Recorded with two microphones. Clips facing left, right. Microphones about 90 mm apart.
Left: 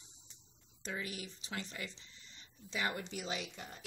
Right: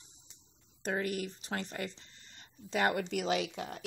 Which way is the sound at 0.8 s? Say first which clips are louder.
Right 9 dB; 55° right (ahead or behind).